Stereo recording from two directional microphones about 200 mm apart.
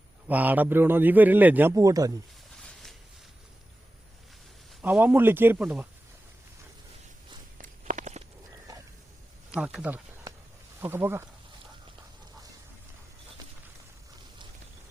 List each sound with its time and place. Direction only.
0.3 s a man's voice: 10° right (ahead or behind)
2.6 s a sound: 5° left (ahead or behind)
4.8 s a man's voice: 10° right (ahead or behind)
7.6 s walk: 40° right (ahead or behind)
9.5 s speech: 5° right (ahead or behind)